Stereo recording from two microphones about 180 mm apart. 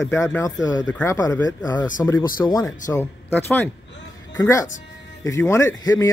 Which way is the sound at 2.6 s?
15° left (ahead or behind).